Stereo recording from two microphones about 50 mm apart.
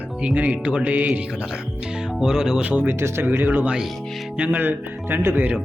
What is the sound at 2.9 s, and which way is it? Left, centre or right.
Speech, right.